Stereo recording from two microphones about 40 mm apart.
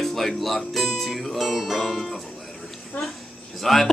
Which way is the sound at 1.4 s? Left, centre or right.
Centre.